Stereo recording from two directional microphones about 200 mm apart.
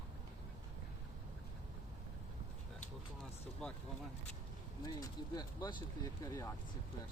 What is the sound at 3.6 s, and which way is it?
Speech, centre (ahead or behind).